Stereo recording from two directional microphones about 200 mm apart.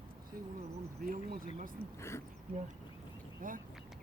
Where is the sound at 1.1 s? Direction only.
45° right (ahead or behind).